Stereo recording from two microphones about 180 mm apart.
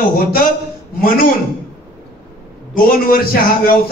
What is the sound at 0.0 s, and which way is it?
Speech, 55° left (ahead or behind).